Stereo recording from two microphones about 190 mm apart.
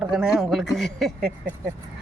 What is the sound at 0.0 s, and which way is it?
Speech, 5° right (ahead or behind).